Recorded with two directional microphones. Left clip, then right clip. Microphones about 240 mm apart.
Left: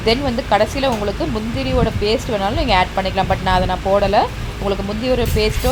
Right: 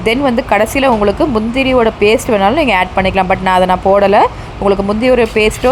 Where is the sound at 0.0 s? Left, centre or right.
Right.